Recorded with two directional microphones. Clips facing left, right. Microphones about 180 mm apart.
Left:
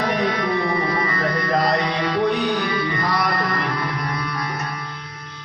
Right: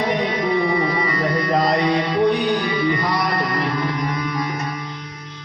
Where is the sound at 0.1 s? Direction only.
20° right (ahead or behind).